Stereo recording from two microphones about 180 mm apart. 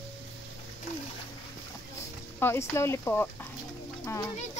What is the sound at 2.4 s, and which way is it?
Speech, 15° left (ahead or behind).